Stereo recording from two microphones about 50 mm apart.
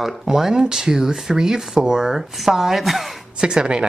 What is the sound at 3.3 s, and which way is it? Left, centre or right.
Speech, centre.